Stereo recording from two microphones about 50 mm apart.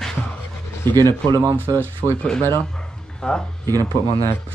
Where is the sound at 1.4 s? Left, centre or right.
Right.